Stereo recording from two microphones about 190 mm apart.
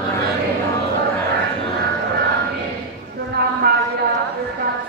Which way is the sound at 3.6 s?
55° right (ahead or behind).